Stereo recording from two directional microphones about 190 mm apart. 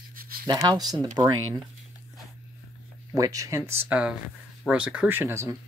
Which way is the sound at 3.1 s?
20° right (ahead or behind).